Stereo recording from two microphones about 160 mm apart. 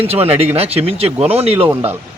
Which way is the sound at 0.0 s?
40° right (ahead or behind).